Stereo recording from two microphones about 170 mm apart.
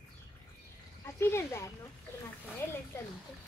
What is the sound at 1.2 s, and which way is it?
Speech, 15° left (ahead or behind).